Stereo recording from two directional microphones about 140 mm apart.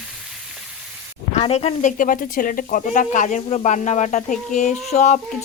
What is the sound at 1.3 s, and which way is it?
Sizzle, 50° left (ahead or behind).